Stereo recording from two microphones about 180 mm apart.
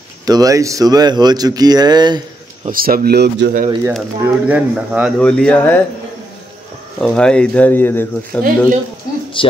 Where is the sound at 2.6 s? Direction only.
55° right (ahead or behind).